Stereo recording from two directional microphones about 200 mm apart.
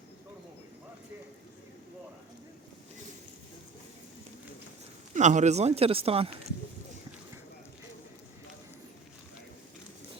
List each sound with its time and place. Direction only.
5.1 s speech: 35° right (ahead or behind)